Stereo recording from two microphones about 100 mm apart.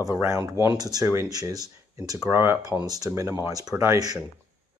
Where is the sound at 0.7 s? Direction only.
40° right (ahead or behind).